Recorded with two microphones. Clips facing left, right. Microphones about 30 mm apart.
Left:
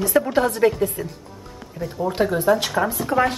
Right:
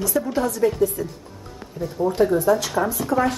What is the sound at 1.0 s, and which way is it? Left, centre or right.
Speech, left.